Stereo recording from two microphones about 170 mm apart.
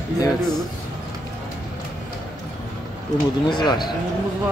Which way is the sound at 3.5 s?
25° left (ahead or behind).